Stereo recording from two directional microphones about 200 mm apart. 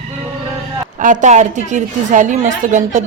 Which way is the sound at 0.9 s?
40° right (ahead or behind).